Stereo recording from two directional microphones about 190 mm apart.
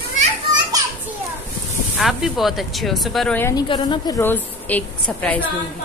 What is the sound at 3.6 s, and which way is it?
Speech, 25° left (ahead or behind).